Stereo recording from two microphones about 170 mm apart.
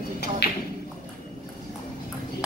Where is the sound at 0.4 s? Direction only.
70° left (ahead or behind).